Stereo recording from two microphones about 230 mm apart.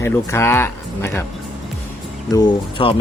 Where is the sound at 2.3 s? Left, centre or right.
Centre.